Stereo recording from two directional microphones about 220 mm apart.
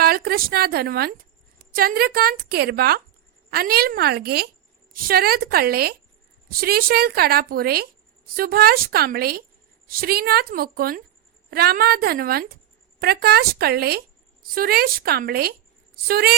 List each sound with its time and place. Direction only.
0.0 s a woman's voice: 45° right (ahead or behind)